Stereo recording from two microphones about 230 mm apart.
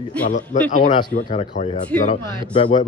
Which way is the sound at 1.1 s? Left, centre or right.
Left.